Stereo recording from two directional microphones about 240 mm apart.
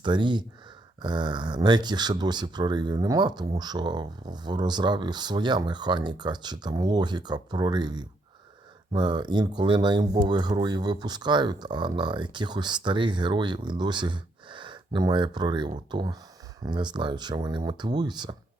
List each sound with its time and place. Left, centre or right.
0.0 s speech: centre